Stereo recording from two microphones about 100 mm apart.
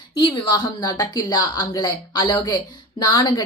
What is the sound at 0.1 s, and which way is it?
A woman's voice, 50° left (ahead or behind).